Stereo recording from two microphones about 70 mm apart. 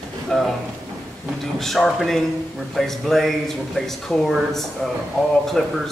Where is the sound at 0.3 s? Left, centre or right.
Centre.